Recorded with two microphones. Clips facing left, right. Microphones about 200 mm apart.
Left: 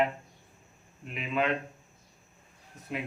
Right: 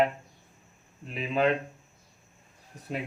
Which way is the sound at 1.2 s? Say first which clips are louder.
Right 4 dB; 35° right (ahead or behind).